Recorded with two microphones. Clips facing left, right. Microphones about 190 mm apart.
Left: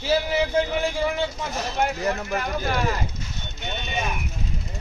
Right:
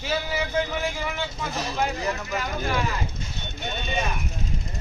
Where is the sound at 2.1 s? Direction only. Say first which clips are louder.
Left 3 dB; 50° left (ahead or behind).